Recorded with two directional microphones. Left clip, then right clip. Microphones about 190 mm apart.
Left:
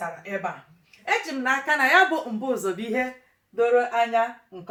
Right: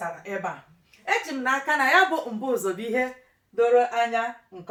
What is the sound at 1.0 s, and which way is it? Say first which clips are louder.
Speech: even; 20° left (ahead or behind).